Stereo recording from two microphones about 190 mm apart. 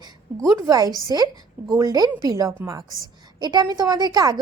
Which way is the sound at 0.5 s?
15° right (ahead or behind).